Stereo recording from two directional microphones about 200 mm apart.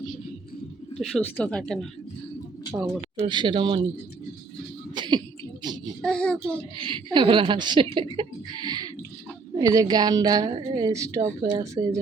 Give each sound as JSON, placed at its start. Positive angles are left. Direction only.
{"t": 0.9, "sound": "speech", "side_deg": 0}
{"t": 3.2, "sound": "a woman's voice", "side_deg": -25}
{"t": 4.9, "sound": "a sound", "side_deg": -20}
{"t": 5.6, "sound": "child singing", "side_deg": -20}
{"t": 6.0, "sound": "speech", "side_deg": 5}
{"t": 6.7, "sound": "a woman's voice", "side_deg": -25}